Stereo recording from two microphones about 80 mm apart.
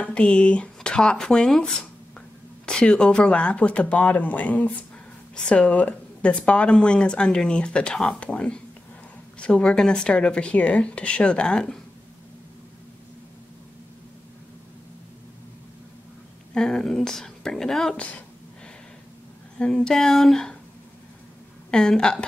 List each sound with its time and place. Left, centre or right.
0.0 s speech: centre
16.5 s a woman's voice: centre
19.6 s a woman's voice: centre
21.6 s speech: centre